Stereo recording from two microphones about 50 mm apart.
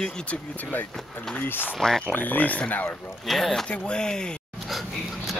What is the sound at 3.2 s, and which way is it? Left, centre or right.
Speech, centre.